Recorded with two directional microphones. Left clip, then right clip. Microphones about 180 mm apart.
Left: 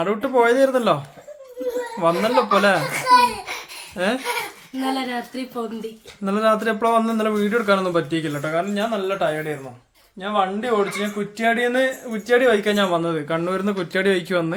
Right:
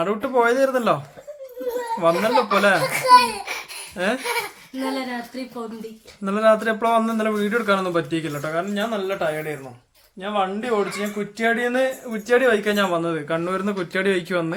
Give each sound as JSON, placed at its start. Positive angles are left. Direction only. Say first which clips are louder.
{"t": 0.0, "sound": "speech", "louder": "left 1 dB", "side_deg": 0}
{"t": 2.0, "sound": "speech", "louder": "even", "side_deg": 0}
{"t": 2.9, "sound": "a sound", "louder": "right 3 dB", "side_deg": -35}
{"t": 3.9, "sound": "speech", "louder": "left 1 dB", "side_deg": 0}
{"t": 4.9, "sound": "speech", "louder": "left 3 dB", "side_deg": 15}
{"t": 6.2, "sound": "speech", "louder": "right 1 dB", "side_deg": 0}